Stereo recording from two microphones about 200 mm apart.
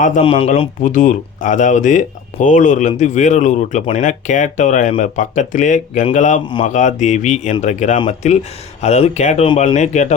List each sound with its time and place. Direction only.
0.2 s speech: 30° left (ahead or behind)
0.8 s speech: 40° left (ahead or behind)